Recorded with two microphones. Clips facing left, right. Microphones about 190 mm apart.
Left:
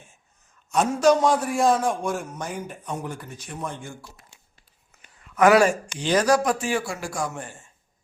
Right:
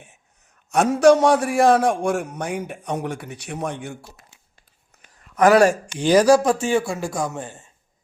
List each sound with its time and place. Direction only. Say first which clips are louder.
0.7 s a man's voice: right 5 dB; 70° right (ahead or behind)
5.2 s speech: right 2 dB; 40° right (ahead or behind)
6.1 s speech: right 5 dB; 30° right (ahead or behind)